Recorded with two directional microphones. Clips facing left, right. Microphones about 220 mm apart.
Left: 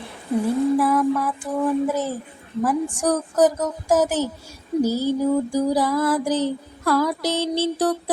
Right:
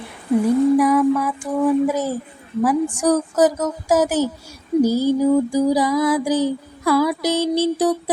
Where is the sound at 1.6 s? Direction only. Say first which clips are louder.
Right 4 dB; 10° right (ahead or behind).